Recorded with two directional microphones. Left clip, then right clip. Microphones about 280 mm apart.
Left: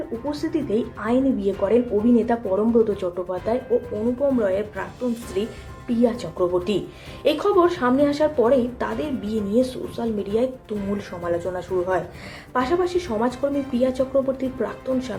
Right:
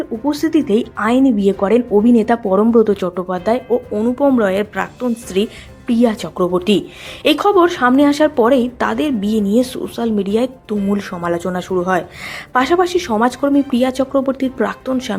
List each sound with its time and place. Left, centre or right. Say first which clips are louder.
0.3 s a woman's voice: right 10 dB; right